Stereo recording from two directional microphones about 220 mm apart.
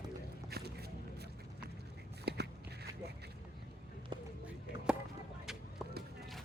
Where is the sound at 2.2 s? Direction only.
50° right (ahead or behind).